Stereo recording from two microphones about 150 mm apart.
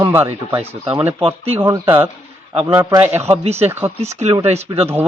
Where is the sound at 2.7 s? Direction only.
20° right (ahead or behind).